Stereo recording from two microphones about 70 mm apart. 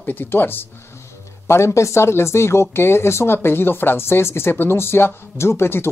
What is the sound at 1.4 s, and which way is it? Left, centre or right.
Speech, left.